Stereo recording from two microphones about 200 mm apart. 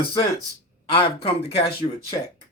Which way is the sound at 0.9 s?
25° left (ahead or behind).